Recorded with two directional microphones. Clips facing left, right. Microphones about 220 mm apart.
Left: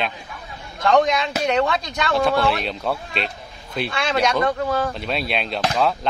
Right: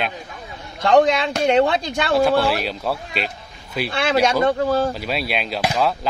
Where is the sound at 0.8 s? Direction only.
30° right (ahead or behind).